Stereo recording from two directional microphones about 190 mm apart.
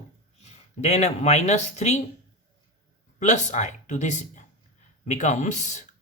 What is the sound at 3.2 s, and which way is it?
Speech, 40° left (ahead or behind).